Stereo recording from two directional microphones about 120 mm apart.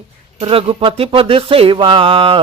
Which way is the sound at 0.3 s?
50° right (ahead or behind).